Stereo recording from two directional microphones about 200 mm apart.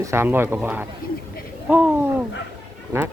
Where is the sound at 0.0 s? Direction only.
15° right (ahead or behind).